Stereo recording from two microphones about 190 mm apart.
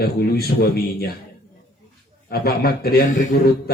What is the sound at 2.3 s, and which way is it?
Speech, 55° left (ahead or behind).